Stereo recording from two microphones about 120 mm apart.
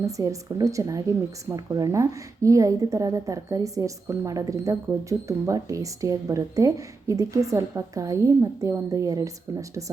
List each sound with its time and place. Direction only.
0.0 s a woman's voice: 25° right (ahead or behind)